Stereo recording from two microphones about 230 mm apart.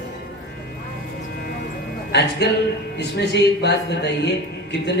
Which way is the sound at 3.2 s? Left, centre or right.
Left.